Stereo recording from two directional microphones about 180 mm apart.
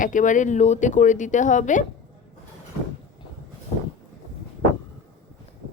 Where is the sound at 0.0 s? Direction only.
45° left (ahead or behind).